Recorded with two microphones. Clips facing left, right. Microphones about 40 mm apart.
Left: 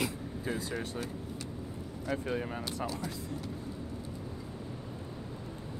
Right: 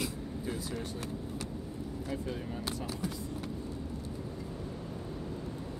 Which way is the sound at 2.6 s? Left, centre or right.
Centre.